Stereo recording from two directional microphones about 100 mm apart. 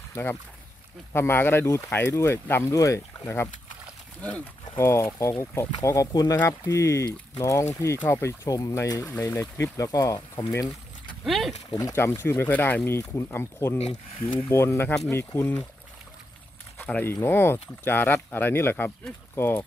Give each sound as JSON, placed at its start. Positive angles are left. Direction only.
{"t": 0.1, "sound": "speech", "side_deg": 25}
{"t": 4.7, "sound": "speech", "side_deg": 25}
{"t": 11.2, "sound": "speech", "side_deg": 0}
{"t": 11.9, "sound": "speech", "side_deg": 25}
{"t": 13.7, "sound": "speech", "side_deg": 90}
{"t": 14.5, "sound": "speech", "side_deg": 25}
{"t": 16.7, "sound": "speech", "side_deg": 20}